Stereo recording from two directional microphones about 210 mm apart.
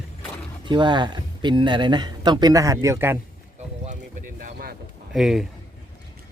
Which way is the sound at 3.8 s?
35° right (ahead or behind).